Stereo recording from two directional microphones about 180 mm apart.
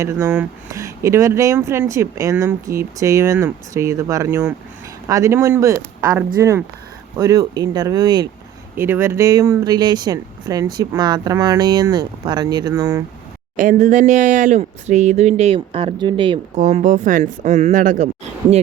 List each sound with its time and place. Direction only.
0.0 s speech: 15° right (ahead or behind)
8.7 s speech: 10° right (ahead or behind)
13.6 s speech: 50° right (ahead or behind); by 16.4 s 30° right (ahead or behind)
16.6 s speech: 45° right (ahead or behind)